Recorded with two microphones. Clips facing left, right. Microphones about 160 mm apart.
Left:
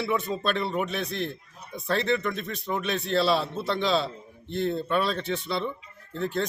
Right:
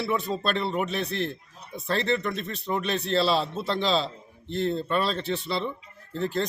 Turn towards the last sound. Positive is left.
turn(degrees=0)  # may be behind; listen again after turning